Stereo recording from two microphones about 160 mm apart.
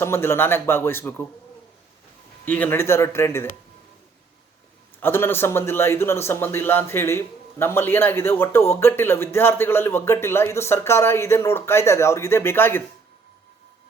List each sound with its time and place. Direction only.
0.0 s a man's voice: 15° left (ahead or behind)
2.4 s a man's voice: 10° left (ahead or behind)
4.9 s a man's voice: 15° left (ahead or behind)